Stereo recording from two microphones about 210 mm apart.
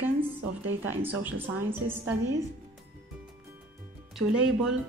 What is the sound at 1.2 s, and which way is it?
Speech, 10° right (ahead or behind).